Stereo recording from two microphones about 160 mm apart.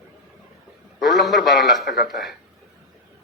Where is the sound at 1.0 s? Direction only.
Centre (ahead or behind).